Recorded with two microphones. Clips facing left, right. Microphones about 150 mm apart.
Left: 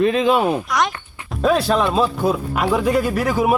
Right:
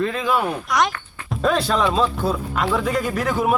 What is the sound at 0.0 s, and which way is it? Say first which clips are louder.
Speech: left 5 dB; 20° left (ahead or behind).